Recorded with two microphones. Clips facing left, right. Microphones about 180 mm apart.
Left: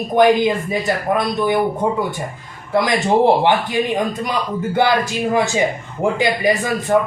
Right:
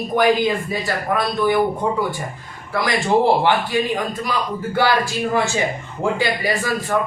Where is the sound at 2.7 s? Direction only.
20° left (ahead or behind).